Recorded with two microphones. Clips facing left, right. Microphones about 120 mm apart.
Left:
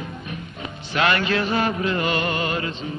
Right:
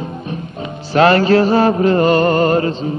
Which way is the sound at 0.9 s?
35° right (ahead or behind).